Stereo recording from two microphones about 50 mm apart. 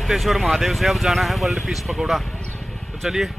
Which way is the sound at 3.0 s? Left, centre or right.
Centre.